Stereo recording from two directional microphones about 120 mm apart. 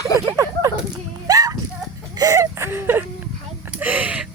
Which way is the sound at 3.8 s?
15° right (ahead or behind).